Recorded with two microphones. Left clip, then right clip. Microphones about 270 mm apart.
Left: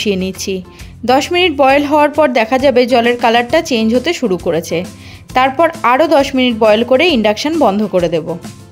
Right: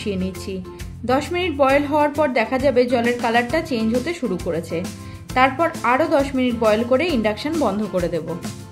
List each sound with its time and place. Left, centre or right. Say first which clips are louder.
0.0 s speech: left 10 dB; left